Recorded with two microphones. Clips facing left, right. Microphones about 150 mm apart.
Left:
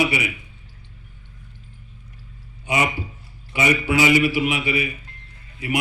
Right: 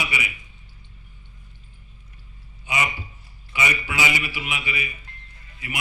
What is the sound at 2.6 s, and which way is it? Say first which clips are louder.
A man's voice: left 5 dB; 45° left (ahead or behind).